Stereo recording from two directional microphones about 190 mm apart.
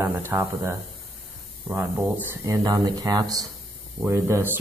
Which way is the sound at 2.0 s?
5° right (ahead or behind).